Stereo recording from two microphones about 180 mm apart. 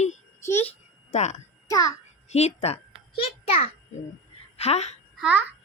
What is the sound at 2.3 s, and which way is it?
A child's voice, 35° left (ahead or behind).